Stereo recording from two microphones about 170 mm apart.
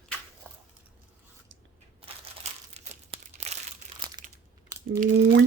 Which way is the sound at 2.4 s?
40° right (ahead or behind).